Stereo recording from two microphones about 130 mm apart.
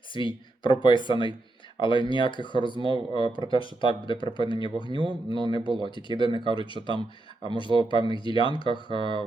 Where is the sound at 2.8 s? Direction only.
35° right (ahead or behind).